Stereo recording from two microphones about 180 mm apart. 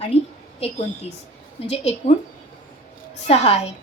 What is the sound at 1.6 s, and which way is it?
Speech, 35° left (ahead or behind).